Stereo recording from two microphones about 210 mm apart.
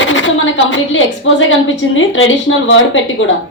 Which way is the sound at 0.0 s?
65° left (ahead or behind).